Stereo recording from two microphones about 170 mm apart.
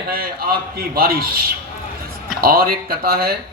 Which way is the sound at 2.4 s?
60° right (ahead or behind).